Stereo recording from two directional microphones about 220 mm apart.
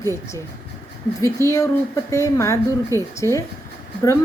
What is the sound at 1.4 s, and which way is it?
A woman's voice, 15° left (ahead or behind).